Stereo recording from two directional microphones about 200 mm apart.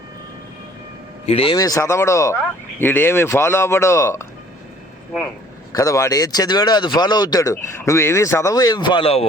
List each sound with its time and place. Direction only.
1.3 s speech: 25° left (ahead or behind)
5.7 s speech: 15° left (ahead or behind)